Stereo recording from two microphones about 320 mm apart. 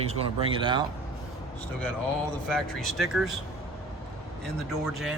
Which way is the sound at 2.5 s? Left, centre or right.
Centre.